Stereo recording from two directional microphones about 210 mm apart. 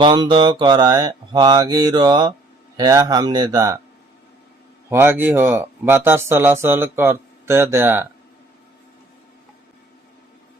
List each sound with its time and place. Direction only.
0.0 s mantra: 20° right (ahead or behind)
2.7 s speech: 20° right (ahead or behind)
4.9 s speech: 10° right (ahead or behind)